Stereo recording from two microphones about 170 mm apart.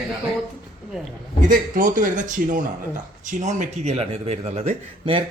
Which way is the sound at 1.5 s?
50° right (ahead or behind).